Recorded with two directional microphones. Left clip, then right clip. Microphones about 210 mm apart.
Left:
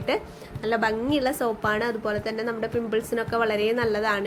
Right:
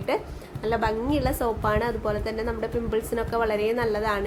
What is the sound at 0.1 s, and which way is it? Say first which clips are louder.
A woman's voice: even; 5° left (ahead or behind).